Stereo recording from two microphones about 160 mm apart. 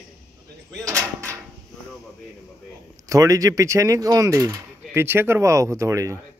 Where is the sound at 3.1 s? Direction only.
20° right (ahead or behind).